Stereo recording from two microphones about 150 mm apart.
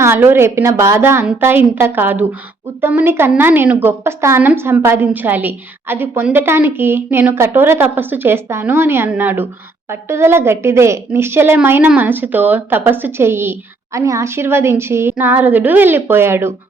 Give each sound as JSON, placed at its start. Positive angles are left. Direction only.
{"t": 0.0, "sound": "a woman's voice", "side_deg": -15}